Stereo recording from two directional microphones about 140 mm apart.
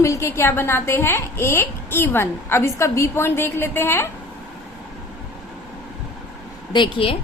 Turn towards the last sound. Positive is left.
turn(degrees=35)  # may be behind; listen again after turning